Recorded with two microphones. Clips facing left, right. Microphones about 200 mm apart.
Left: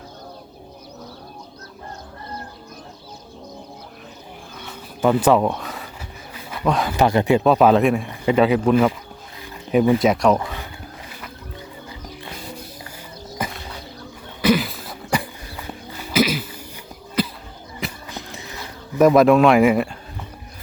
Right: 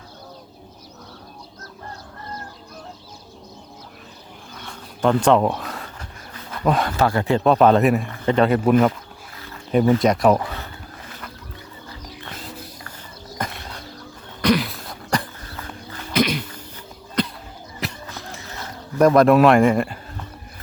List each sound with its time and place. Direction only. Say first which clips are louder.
4.6 s a sound: left 1 dB; 5° left (ahead or behind)
6.7 s speech: right 1 dB; centre (ahead or behind)
6.9 s speech: left 3 dB; 20° left (ahead or behind)
7.4 s speech: right 2 dB; 5° left (ahead or behind)
8.1 s speech: left 1 dB; 10° left (ahead or behind)
9.7 s speech: left 1 dB; 15° left (ahead or behind)
10.0 s speech: even; centre (ahead or behind)
13.4 s a sound: left 1 dB; 5° left (ahead or behind)
18.1 s a sound: left 1 dB; 15° left (ahead or behind)
18.9 s speech: left 1 dB; centre (ahead or behind)